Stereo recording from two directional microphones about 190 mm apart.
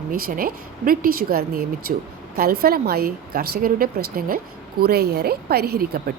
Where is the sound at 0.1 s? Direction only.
50° right (ahead or behind).